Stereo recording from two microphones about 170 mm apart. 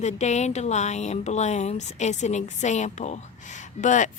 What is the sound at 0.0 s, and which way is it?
A woman's voice, 40° left (ahead or behind).